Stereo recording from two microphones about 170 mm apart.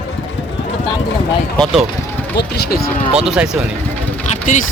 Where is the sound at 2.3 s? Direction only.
70° left (ahead or behind).